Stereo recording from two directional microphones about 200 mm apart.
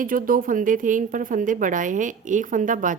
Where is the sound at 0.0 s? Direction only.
45° right (ahead or behind).